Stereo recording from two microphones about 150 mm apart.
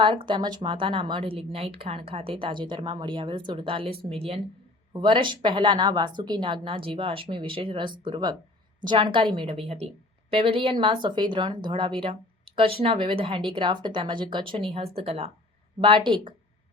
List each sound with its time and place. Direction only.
0.0 s speech: 30° right (ahead or behind)